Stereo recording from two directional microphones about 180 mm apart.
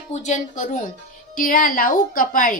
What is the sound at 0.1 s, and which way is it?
A woman's voice, 40° left (ahead or behind).